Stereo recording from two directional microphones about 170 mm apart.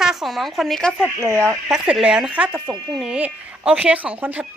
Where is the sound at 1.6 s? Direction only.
5° right (ahead or behind).